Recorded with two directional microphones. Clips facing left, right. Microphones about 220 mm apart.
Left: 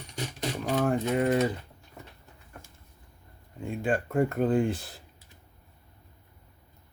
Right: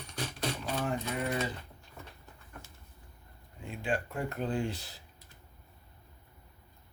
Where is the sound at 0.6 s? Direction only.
50° left (ahead or behind).